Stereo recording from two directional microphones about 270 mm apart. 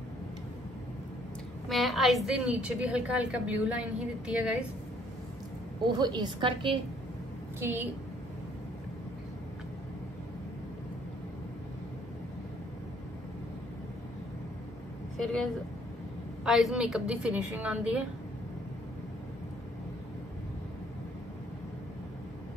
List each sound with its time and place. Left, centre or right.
1.7 s a woman's voice: centre
5.9 s a woman's voice: centre
7.6 s a woman's voice: centre
15.1 s speech: centre
16.4 s a woman's voice: centre